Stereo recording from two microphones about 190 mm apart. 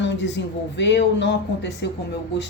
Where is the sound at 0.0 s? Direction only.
70° left (ahead or behind).